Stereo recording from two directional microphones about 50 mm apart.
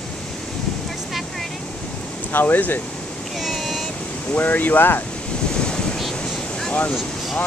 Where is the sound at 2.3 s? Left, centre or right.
Left.